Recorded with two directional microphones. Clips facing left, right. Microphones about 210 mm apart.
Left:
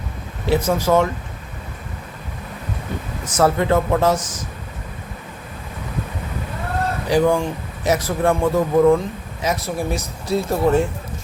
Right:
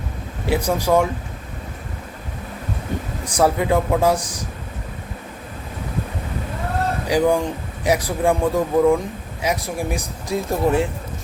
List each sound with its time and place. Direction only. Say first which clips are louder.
0.4 s a man's voice: left 2 dB; 15° right (ahead or behind)
3.2 s a man's voice: left 1 dB; 15° right (ahead or behind)
7.1 s a man's voice: left 1 dB; 15° right (ahead or behind)